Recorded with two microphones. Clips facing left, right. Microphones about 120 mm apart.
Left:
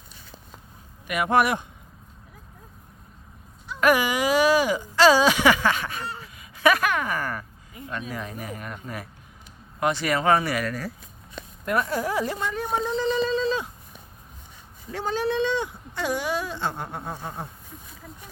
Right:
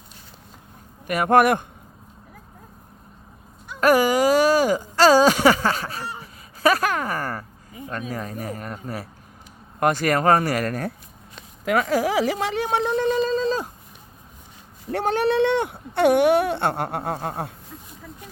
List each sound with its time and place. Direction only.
1.0 s speech: 45° right (ahead or behind)
3.8 s speech: 40° right (ahead or behind)
11.6 s speech: 90° right; by 13.7 s 40° right (ahead or behind)
14.8 s speech: 65° right (ahead or behind)